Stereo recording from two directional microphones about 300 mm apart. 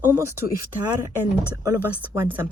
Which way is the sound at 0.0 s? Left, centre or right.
Centre.